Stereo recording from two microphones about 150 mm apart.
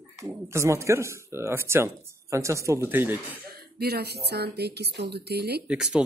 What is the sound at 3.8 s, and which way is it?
Speech, 90° right.